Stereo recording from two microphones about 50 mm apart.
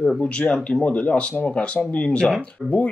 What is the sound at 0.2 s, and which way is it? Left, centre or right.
Speech, left.